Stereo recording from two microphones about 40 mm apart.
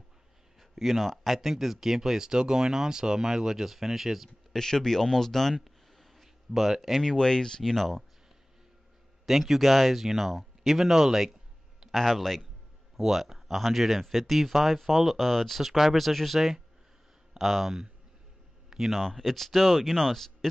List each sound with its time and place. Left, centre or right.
0.6 s speech: centre
4.5 s speech: centre
5.6 s a sound: centre
7.0 s speech: centre
7.7 s speech: centre
9.2 s speech: centre
11.9 s speech: centre
12.9 s speech: centre
18.7 s a sound: centre
18.9 s speech: centre